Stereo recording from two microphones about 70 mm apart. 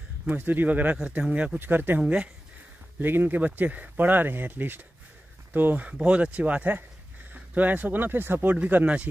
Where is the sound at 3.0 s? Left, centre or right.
Right.